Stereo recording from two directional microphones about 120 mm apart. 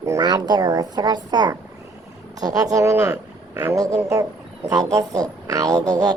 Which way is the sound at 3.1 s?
15° right (ahead or behind).